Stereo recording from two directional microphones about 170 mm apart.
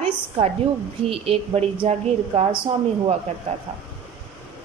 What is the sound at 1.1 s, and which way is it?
A woman's voice, 35° right (ahead or behind).